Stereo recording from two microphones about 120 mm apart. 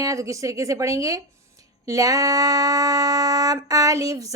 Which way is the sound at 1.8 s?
30° right (ahead or behind).